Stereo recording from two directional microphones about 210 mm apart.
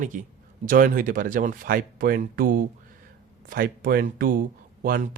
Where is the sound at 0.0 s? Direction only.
40° right (ahead or behind).